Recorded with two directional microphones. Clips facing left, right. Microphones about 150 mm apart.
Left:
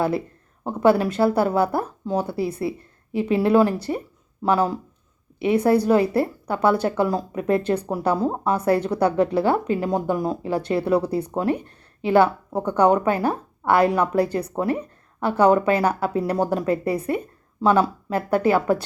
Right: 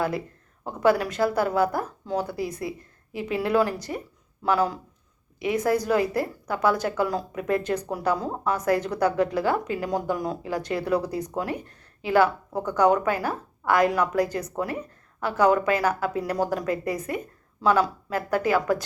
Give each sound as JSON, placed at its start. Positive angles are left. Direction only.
{"t": 0.6, "sound": "a woman's voice", "side_deg": 25}